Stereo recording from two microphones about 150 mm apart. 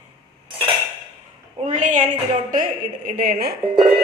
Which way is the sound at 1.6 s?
55° right (ahead or behind).